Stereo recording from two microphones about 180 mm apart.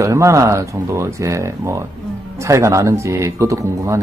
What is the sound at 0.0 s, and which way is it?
Speech, 15° right (ahead or behind).